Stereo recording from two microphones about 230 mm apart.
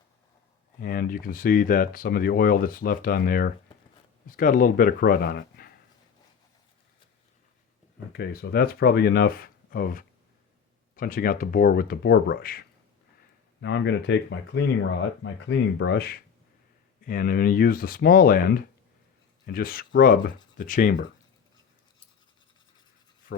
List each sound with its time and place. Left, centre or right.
0.8 s speech: left
8.1 s speech: left
13.6 s speech: left